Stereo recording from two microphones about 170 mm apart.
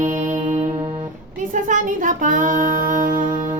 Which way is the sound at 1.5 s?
50° right (ahead or behind).